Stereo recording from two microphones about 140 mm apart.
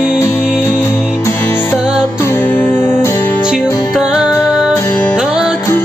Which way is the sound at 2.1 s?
20° left (ahead or behind).